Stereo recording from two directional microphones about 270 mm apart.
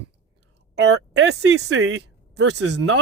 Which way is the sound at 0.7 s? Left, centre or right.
Right.